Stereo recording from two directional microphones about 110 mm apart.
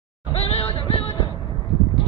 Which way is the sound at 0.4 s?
60° left (ahead or behind).